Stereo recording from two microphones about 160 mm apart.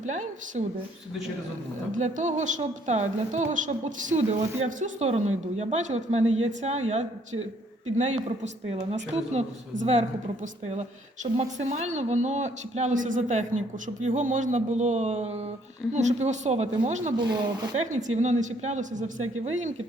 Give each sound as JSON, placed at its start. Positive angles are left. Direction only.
{"t": 0.0, "sound": "a woman's voice", "side_deg": -50}
{"t": 1.9, "sound": "a woman's voice", "side_deg": -50}
{"t": 9.1, "sound": "a woman's voice", "side_deg": -40}